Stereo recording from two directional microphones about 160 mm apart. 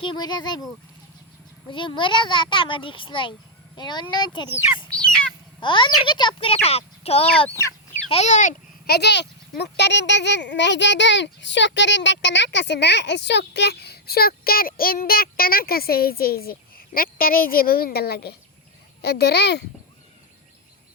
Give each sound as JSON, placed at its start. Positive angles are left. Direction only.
{"t": 0.0, "sound": "speech", "side_deg": 30}
{"t": 1.7, "sound": "a child's voice", "side_deg": 30}
{"t": 5.5, "sound": "a child's voice", "side_deg": 30}
{"t": 8.9, "sound": "a child's voice", "side_deg": 90}